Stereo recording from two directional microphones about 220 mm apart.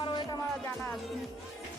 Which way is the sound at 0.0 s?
20° left (ahead or behind).